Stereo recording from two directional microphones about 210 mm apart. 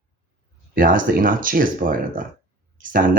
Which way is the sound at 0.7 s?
40° right (ahead or behind).